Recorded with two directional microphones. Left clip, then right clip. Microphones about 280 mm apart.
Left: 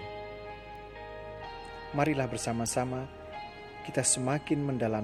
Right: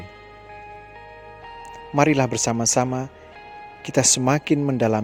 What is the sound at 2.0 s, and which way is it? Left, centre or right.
Speech, right.